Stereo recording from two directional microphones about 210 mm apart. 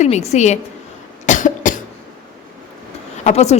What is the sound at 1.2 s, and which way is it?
Cough, 35° left (ahead or behind).